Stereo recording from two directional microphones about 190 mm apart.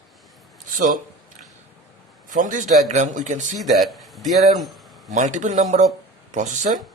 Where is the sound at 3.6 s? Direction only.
Centre (ahead or behind).